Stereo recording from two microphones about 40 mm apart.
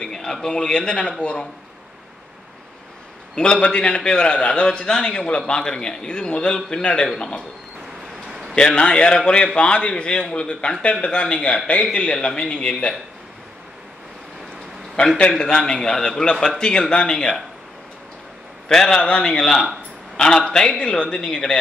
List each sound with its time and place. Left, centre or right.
0.0 s a man's voice: centre
3.3 s a man's voice: left
8.3 s a sound: centre
8.7 s a man's voice: left
15.0 s a man's voice: left
15.3 s a man's voice: centre
18.7 s a man's voice: centre
18.9 s a man's voice: left